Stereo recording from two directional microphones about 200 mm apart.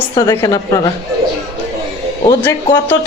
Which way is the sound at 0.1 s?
20° left (ahead or behind).